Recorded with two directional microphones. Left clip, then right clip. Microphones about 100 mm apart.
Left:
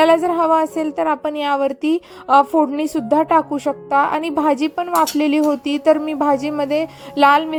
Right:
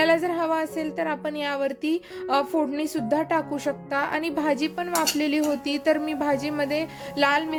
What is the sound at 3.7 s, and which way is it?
A woman's voice, 40° left (ahead or behind).